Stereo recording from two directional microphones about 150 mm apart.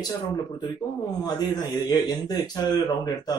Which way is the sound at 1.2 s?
25° left (ahead or behind).